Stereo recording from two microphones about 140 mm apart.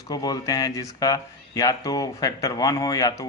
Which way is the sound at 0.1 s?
30° left (ahead or behind).